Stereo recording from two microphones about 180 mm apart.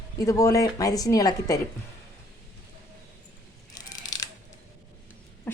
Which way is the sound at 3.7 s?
20° left (ahead or behind).